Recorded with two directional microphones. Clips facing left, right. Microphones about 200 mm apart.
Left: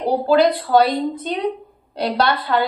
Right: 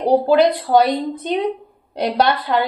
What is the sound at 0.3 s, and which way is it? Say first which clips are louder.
A woman's voice: left 3 dB; 20° right (ahead or behind).